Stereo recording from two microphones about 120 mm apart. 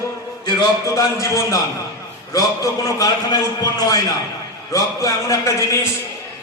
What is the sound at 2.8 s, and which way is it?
A man's voice, 30° left (ahead or behind).